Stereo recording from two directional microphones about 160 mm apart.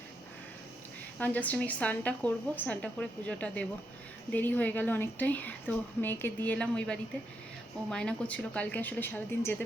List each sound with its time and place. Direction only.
1.2 s a woman's voice: 10° left (ahead or behind)